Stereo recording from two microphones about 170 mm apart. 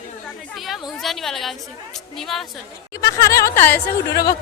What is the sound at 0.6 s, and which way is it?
A woman's voice, centre (ahead or behind).